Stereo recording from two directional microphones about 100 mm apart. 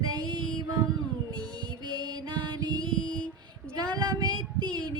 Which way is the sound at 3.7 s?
40° right (ahead or behind).